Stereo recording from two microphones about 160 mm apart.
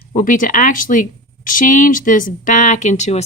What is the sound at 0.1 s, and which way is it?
Speech, 55° left (ahead or behind).